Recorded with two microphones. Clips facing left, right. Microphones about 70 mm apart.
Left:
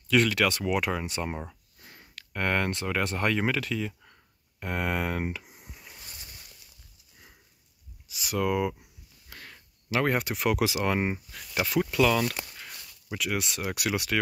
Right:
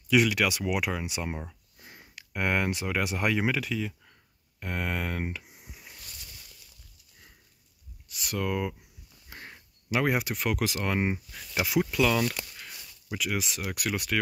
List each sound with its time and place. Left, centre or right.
0.1 s speech: centre
1.8 s speech: centre
5.9 s a sound: left
8.1 s speech: centre
9.3 s a sound: right
9.8 s speech: centre